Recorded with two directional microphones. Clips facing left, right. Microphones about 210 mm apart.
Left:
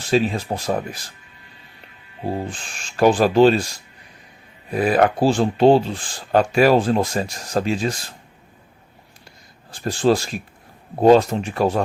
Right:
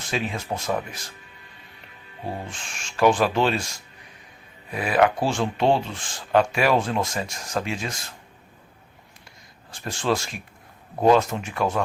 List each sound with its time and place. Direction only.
0.1 s speech: 35° left (ahead or behind)
2.2 s speech: 35° left (ahead or behind)
4.7 s speech: 35° left (ahead or behind)
9.7 s speech: 35° left (ahead or behind)